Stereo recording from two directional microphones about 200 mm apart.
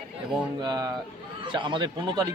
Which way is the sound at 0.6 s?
20° right (ahead or behind).